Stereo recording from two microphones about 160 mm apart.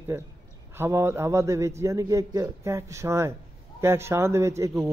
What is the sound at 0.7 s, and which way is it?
A man's voice, 15° right (ahead or behind).